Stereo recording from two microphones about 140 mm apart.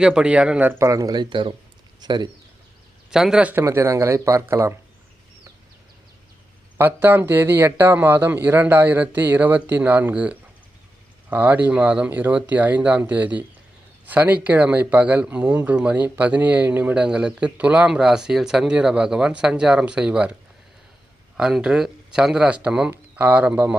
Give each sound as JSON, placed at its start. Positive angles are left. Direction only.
{"t": 0.0, "sound": "speech", "side_deg": -5}
{"t": 3.1, "sound": "speech", "side_deg": -5}
{"t": 6.7, "sound": "speech", "side_deg": -15}
{"t": 21.3, "sound": "speech", "side_deg": -5}